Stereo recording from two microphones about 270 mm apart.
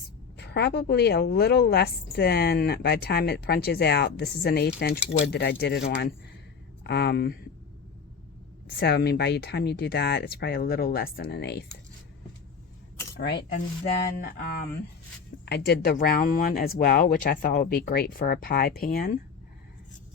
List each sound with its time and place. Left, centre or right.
0.3 s a woman's voice: left
8.8 s a woman's voice: left
13.1 s a woman's voice: left
15.4 s a woman's voice: left